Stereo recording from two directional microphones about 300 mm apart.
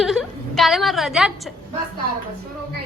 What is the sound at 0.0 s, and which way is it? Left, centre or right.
A woman's voice, centre.